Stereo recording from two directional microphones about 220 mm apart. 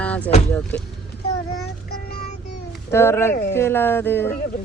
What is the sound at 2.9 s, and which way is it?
Speech, 10° left (ahead or behind).